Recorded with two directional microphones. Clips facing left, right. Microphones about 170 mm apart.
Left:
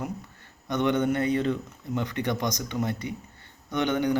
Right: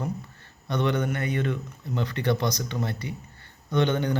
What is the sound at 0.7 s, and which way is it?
Speech, 20° left (ahead or behind).